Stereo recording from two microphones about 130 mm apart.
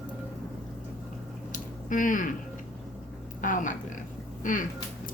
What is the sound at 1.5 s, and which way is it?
Squish, 90° left.